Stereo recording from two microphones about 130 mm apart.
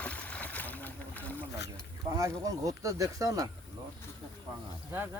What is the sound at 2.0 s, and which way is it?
Speech, 25° right (ahead or behind).